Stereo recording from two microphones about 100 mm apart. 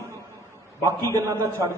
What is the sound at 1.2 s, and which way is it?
Speech, 30° right (ahead or behind).